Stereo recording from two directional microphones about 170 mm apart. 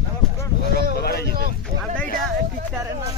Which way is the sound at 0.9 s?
65° left (ahead or behind).